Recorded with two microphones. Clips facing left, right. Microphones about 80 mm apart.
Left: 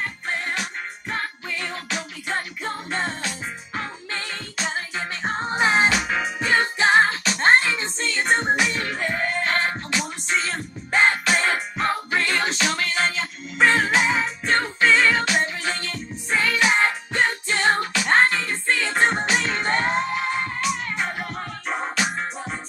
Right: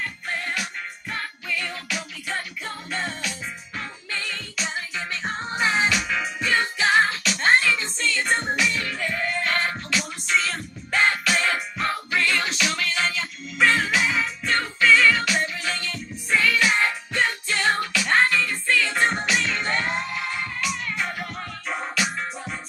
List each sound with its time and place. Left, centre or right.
0.0 s music: left